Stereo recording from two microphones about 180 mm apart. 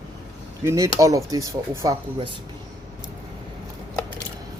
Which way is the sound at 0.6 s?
15° right (ahead or behind).